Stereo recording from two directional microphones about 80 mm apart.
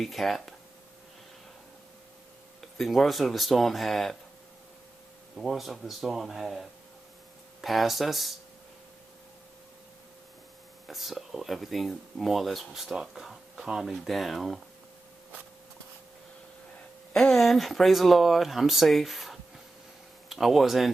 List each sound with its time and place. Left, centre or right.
0.0 s speech: centre
2.6 s speech: centre
5.4 s speech: centre
10.8 s speech: centre
17.2 s speech: centre